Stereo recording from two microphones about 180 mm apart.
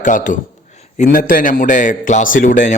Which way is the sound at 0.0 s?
45° left (ahead or behind).